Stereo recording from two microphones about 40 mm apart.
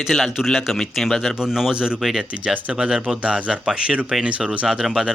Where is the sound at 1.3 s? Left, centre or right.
Centre.